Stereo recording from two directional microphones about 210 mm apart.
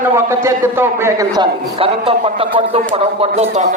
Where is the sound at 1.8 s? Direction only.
25° right (ahead or behind).